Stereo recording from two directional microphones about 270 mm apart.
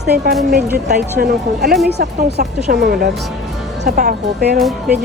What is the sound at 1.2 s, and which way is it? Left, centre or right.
Speech, right.